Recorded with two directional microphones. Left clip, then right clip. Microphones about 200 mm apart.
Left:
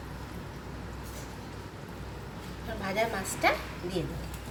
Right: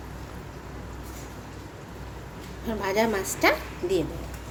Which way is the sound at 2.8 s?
50° right (ahead or behind).